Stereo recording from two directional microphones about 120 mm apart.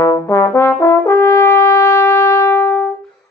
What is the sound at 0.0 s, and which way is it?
Brass instrument, 20° left (ahead or behind).